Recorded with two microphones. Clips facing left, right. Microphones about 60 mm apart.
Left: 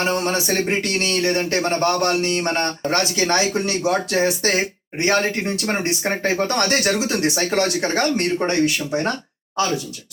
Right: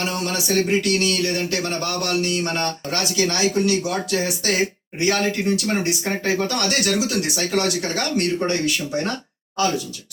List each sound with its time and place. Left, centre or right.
0.0 s speech: left